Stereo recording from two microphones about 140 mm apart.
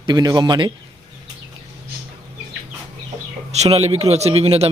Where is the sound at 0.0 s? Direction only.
30° right (ahead or behind).